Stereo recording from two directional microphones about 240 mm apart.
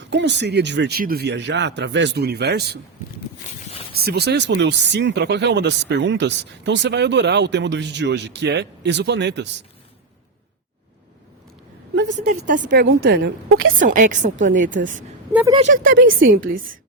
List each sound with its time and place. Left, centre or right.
0.1 s speech: right
3.9 s speech: right
12.1 s a woman's voice: right
13.0 s speech: right
13.7 s a woman's voice: right
15.3 s speech: centre
15.5 s a woman's voice: right